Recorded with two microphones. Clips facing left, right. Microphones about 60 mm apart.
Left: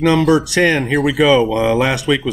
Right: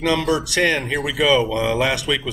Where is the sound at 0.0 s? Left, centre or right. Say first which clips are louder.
Left 7 dB; left.